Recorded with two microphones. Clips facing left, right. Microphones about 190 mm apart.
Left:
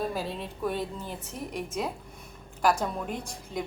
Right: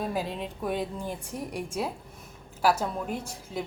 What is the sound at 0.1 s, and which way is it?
A woman's voice, 15° right (ahead or behind).